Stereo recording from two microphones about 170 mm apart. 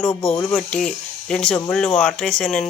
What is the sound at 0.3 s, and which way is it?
Speech, 5° left (ahead or behind).